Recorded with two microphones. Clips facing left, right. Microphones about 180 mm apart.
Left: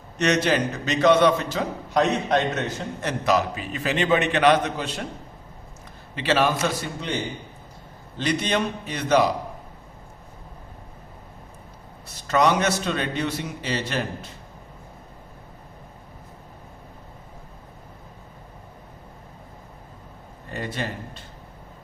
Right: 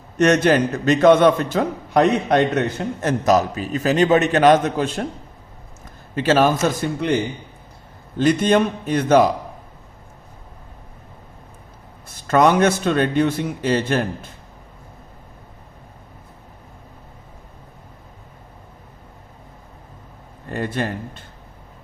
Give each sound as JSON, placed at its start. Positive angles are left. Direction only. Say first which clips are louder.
{"t": 0.2, "sound": "a man's voice", "louder": "right 6 dB", "side_deg": -50}
{"t": 6.1, "sound": "a man's voice", "louder": "right 5 dB", "side_deg": -45}
{"t": 8.2, "sound": "a man's voice", "louder": "right 8 dB", "side_deg": -50}
{"t": 12.0, "sound": "a man's voice", "louder": "right 5 dB", "side_deg": -50}
{"t": 20.5, "sound": "a man's voice", "louder": "right 6 dB", "side_deg": -55}